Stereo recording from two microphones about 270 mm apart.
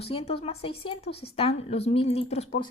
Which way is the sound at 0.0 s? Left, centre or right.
Left.